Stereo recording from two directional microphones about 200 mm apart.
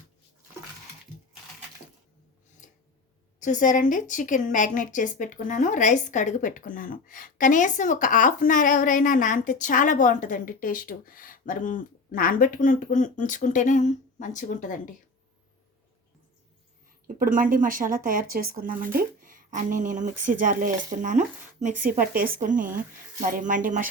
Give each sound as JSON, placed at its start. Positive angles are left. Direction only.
{"t": 2.6, "sound": "a sound", "side_deg": 40}
{"t": 3.4, "sound": "a woman's voice", "side_deg": 40}
{"t": 17.2, "sound": "speech", "side_deg": -45}